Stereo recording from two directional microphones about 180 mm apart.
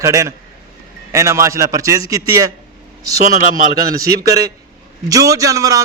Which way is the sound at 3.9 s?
20° right (ahead or behind).